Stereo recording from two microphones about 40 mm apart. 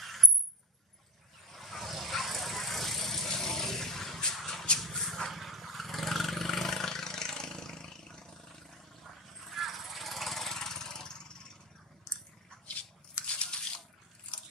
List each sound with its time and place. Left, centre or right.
0.0 s a sound: centre
1.5 s vehicle: centre
4.4 s shuffle: centre
4.7 s vehicle: centre
5.3 s vehicle: centre
9.4 s vehicle: centre
13.3 s a sound: left